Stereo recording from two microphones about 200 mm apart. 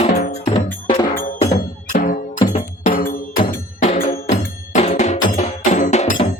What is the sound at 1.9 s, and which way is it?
Music, 40° left (ahead or behind).